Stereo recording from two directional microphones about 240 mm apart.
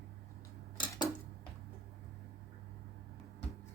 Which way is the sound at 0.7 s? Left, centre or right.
Centre.